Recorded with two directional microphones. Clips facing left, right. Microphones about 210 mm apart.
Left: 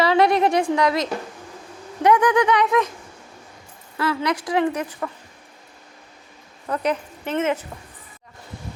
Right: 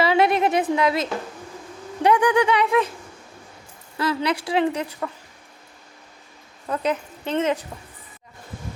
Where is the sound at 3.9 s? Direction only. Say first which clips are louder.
Even; 20° right (ahead or behind).